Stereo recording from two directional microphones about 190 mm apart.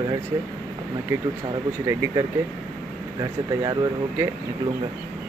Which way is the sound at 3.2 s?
20° right (ahead or behind).